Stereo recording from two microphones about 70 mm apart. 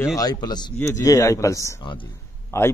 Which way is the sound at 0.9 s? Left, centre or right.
Left.